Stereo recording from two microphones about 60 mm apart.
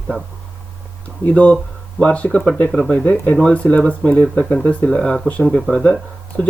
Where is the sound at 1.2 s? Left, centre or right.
Left.